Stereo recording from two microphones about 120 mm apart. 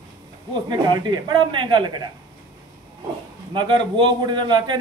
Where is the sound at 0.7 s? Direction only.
35° right (ahead or behind).